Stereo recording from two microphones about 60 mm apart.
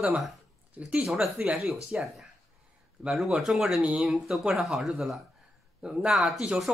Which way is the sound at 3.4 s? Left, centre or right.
Centre.